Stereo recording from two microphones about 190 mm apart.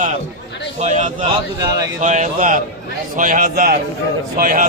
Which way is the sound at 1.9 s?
40° right (ahead or behind).